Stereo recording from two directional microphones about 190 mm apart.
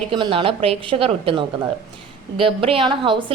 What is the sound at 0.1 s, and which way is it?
A woman's voice, 25° right (ahead or behind).